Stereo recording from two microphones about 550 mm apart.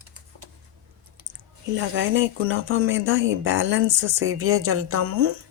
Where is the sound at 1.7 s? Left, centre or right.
Centre.